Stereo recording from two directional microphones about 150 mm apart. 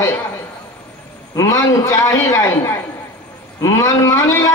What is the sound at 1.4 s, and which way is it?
A man's voice, 20° left (ahead or behind).